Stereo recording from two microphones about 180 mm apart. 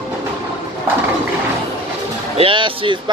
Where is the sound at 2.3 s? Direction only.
30° right (ahead or behind).